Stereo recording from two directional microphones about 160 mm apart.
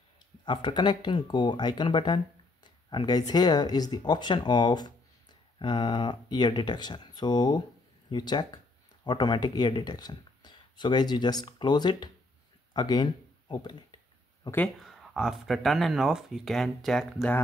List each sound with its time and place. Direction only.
0.5 s speech: 30° left (ahead or behind)
14.8 s speech: centre (ahead or behind)